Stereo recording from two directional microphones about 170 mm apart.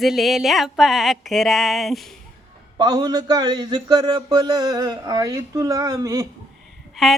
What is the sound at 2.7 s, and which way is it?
Speech, 25° right (ahead or behind).